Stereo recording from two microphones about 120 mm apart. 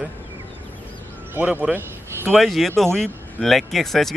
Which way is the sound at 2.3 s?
Centre (ahead or behind).